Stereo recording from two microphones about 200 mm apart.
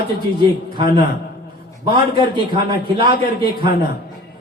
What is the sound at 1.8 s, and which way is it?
A man's voice, 25° right (ahead or behind).